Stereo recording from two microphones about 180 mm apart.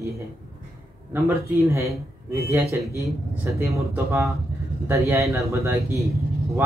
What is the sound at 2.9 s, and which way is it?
Speech, 15° right (ahead or behind).